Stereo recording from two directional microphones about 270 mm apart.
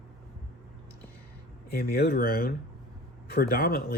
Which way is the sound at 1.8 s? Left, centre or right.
Left.